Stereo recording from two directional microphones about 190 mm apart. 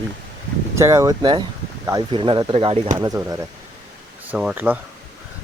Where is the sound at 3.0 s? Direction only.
15° right (ahead or behind).